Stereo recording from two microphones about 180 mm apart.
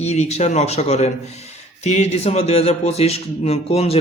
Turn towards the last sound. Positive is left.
turn(degrees=35)  # may be behind; listen again after turning